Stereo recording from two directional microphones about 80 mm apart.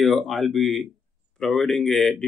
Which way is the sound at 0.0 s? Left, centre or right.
Centre.